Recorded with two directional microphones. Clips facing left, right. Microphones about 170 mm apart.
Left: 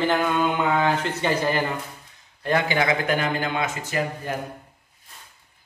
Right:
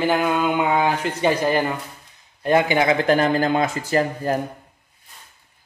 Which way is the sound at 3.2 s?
40° right (ahead or behind).